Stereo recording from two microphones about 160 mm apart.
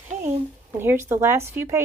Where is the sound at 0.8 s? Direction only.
15° right (ahead or behind).